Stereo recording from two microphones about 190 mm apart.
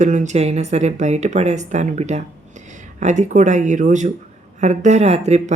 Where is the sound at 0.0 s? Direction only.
40° right (ahead or behind).